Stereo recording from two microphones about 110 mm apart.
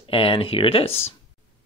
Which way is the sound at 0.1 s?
55° left (ahead or behind).